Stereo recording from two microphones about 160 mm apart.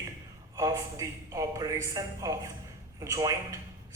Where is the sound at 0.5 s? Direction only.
20° right (ahead or behind).